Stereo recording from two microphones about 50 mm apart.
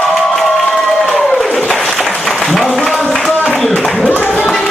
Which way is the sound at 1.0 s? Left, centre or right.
Centre.